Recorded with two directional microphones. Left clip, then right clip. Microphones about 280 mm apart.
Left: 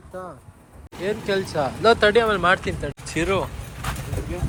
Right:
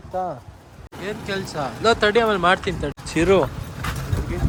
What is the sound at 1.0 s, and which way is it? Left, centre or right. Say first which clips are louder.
Speech: left 4 dB; centre.